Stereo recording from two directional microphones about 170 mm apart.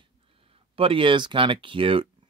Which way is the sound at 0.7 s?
30° right (ahead or behind).